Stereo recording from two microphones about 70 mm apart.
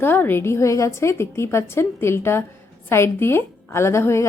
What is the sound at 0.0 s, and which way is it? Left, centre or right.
Speech, left.